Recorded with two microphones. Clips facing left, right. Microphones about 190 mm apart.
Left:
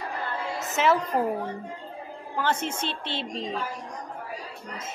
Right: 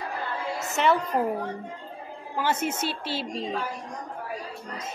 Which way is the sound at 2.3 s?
10° right (ahead or behind).